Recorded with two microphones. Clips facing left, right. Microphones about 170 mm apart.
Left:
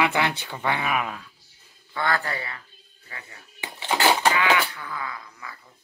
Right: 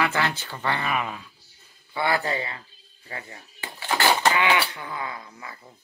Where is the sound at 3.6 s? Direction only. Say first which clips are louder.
Left 1 dB; 20° left (ahead or behind).